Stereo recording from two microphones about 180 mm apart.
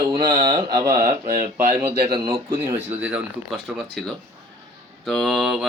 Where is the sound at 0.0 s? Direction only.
20° right (ahead or behind).